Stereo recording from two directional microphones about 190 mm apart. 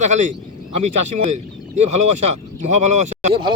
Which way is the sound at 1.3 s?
35° right (ahead or behind).